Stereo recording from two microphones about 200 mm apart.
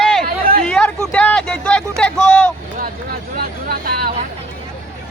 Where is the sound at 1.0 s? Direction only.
5° left (ahead or behind).